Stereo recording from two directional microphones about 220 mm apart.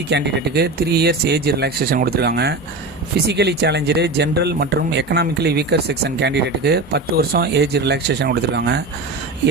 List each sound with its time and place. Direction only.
0.1 s speech: 50° right (ahead or behind)